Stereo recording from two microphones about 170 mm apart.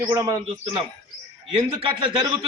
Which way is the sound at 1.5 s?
30° right (ahead or behind).